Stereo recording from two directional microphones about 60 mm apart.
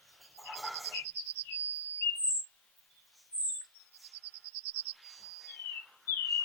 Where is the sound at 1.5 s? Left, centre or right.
Left.